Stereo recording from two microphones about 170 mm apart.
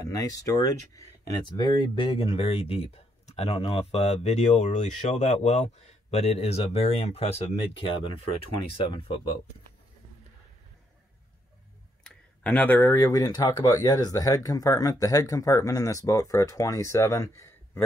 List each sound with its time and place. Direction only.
0.0 s speech: 20° left (ahead or behind)
12.0 s speech: 10° left (ahead or behind)